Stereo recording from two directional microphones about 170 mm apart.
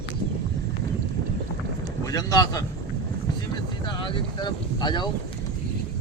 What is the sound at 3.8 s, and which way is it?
Speech, 30° left (ahead or behind).